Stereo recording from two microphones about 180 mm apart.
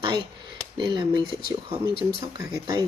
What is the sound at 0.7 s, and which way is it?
Speech, 25° right (ahead or behind).